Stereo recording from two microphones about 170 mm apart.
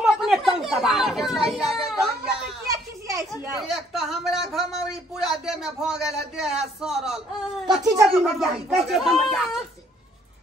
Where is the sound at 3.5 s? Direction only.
Centre (ahead or behind).